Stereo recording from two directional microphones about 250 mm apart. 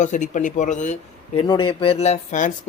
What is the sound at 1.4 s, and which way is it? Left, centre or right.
Speech, centre.